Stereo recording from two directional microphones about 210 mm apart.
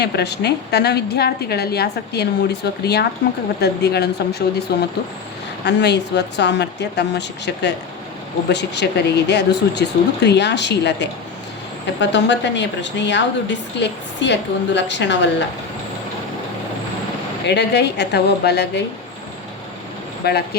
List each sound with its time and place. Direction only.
0.0 s a woman's voice: 50° left (ahead or behind)
5.6 s a woman's voice: 55° left (ahead or behind)
17.4 s a woman's voice: 55° left (ahead or behind)
20.2 s a woman's voice: 50° left (ahead or behind)